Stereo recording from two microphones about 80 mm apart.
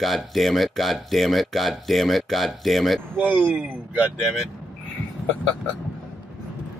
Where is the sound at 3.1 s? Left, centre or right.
Centre.